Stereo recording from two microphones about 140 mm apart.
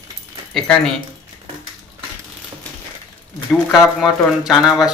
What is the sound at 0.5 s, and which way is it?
Speech, 5° left (ahead or behind).